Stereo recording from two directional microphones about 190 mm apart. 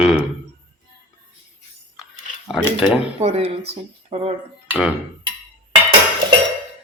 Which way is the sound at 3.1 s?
35° right (ahead or behind).